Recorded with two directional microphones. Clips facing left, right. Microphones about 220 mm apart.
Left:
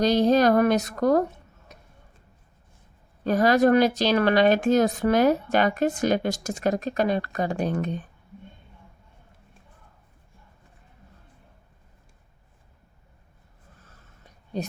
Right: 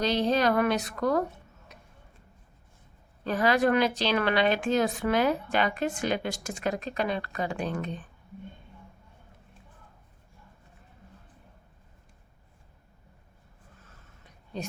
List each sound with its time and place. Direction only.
0.0 s speech: 45° left (ahead or behind)
3.2 s a woman's voice: 40° left (ahead or behind)